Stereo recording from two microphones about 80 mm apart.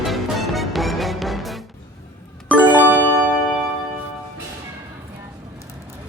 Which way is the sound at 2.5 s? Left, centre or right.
Right.